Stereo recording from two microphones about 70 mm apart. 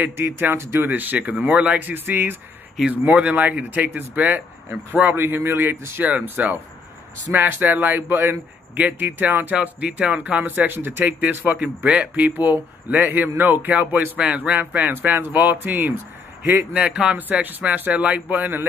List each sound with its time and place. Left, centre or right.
0.0 s speech: right
0.8 s speech: right
1.8 s speech: right
5.1 s speech: right
16.7 s speech: centre